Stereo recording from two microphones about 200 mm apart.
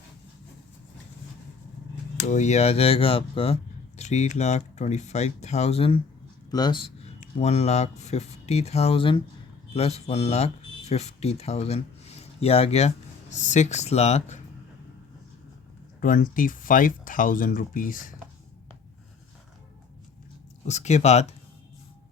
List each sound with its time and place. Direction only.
2.2 s speech: 35° left (ahead or behind)
7.2 s speech: 35° left (ahead or behind)
16.0 s speech: 40° left (ahead or behind)
20.7 s speech: 35° left (ahead or behind)